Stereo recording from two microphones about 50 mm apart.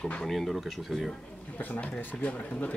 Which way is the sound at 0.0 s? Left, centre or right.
Centre.